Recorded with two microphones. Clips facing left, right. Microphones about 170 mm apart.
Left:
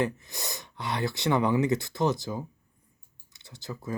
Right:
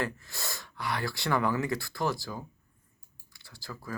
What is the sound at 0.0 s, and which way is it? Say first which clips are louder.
Speech: left 5 dB; 20° left (ahead or behind).